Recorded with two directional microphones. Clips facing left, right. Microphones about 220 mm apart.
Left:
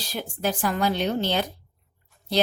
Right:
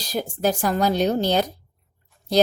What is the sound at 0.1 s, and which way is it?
Speech, 40° right (ahead or behind).